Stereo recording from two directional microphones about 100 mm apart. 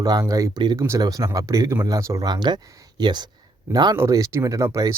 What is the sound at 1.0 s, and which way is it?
Speech, 40° right (ahead or behind).